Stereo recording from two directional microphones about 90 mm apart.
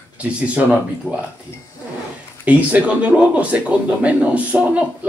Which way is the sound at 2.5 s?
15° right (ahead or behind).